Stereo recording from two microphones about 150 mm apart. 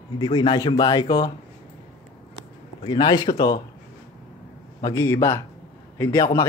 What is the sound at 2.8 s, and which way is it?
Speech, 30° left (ahead or behind).